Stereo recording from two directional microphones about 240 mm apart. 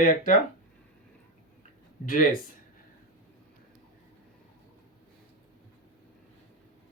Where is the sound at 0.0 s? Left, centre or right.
Left.